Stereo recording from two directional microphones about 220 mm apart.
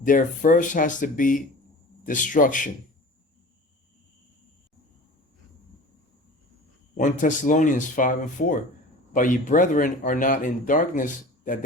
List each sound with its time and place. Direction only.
0.0 s speech: 35° left (ahead or behind)
6.9 s speech: 35° left (ahead or behind)